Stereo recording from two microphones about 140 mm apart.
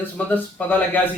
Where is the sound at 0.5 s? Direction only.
10° left (ahead or behind).